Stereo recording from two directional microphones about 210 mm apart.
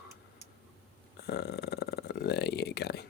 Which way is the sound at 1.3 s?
50° left (ahead or behind).